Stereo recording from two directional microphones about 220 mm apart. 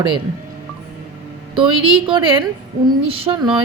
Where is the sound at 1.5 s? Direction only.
25° right (ahead or behind).